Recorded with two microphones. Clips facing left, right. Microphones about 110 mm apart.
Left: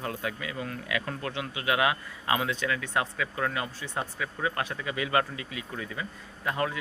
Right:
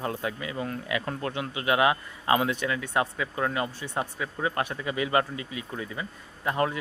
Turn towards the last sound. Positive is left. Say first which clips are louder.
# right 3 dB
turn(degrees=-30)  # may be behind; listen again after turning